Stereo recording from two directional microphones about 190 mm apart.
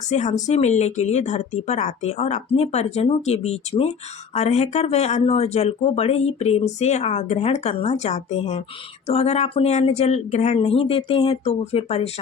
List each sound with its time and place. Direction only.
0.1 s speech: 40° left (ahead or behind)